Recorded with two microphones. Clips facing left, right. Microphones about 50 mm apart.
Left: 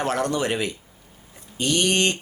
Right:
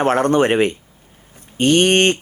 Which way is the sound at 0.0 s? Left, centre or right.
Right.